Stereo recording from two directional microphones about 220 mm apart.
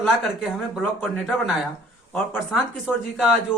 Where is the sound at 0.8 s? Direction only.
Centre (ahead or behind).